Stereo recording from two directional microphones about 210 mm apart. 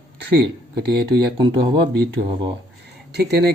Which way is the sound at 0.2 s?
55° right (ahead or behind).